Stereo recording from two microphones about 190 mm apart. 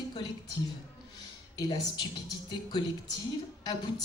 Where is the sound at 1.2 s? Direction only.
20° left (ahead or behind).